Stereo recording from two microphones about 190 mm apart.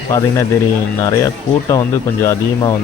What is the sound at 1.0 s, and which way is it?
Speech, 15° left (ahead or behind).